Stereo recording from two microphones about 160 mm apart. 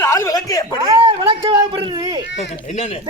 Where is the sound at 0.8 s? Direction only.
30° right (ahead or behind).